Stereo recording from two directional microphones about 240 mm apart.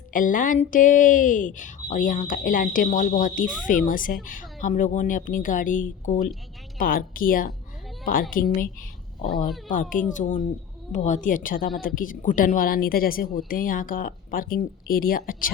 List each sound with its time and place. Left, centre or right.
0.1 s speech: left